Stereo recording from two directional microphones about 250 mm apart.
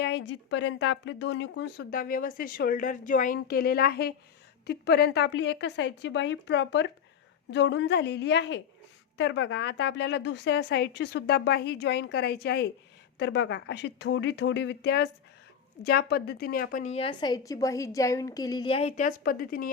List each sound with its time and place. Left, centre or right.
0.0 s a woman's voice: left